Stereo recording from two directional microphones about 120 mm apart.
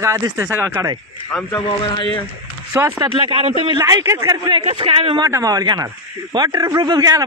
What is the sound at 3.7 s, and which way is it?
Speech, 25° right (ahead or behind).